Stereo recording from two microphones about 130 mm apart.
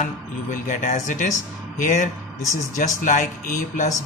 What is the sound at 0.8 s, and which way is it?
Speech, 75° left (ahead or behind).